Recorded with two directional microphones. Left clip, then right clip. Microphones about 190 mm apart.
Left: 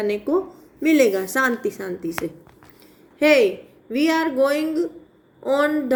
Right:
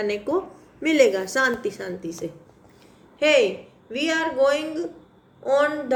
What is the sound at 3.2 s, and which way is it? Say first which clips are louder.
A woman's voice: left 2 dB; 40° left (ahead or behind).